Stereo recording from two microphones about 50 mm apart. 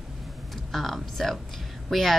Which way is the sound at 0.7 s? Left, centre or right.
Centre.